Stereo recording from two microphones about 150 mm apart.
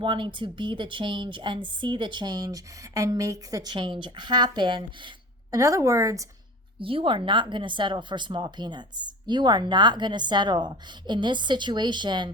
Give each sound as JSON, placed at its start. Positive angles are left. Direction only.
{"t": 0.0, "sound": "speech", "side_deg": -35}
{"t": 5.5, "sound": "speech", "side_deg": -20}
{"t": 6.7, "sound": "speech", "side_deg": -35}